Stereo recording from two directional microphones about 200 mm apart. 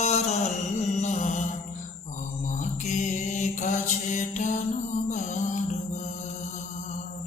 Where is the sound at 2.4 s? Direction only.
40° left (ahead or behind).